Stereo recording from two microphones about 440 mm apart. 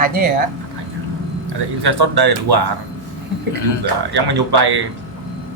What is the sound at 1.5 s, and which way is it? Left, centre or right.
Speech, right.